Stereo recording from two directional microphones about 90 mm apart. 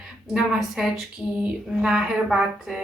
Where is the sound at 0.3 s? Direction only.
5° right (ahead or behind).